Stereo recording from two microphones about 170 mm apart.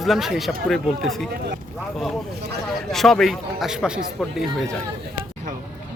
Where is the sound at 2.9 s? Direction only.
Centre (ahead or behind).